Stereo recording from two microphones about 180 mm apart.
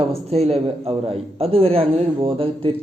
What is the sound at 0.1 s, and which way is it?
A man's voice, 35° right (ahead or behind).